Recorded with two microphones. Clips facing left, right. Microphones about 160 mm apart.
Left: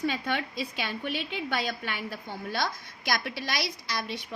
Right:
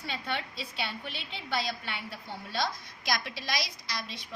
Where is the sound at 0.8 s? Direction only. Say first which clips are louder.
Left 5 dB; 70° left (ahead or behind).